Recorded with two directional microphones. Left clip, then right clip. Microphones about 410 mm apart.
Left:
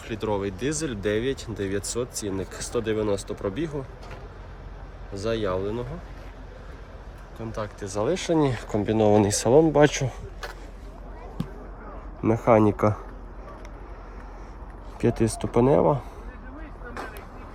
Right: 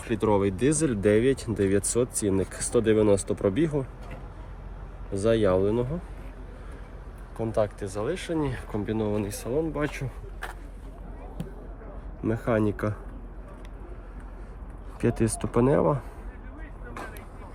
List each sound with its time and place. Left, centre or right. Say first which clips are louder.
0.0 s speech: right 4 dB; centre
5.1 s speech: right 4 dB; centre
7.3 s speech: right 7 dB; centre
7.9 s speech: left 5 dB; centre
12.2 s speech: left 7 dB; centre
15.0 s speech: left 2 dB; centre